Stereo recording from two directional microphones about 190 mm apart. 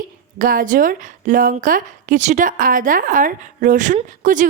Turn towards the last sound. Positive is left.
turn(degrees=-45)  # may be behind; listen again after turning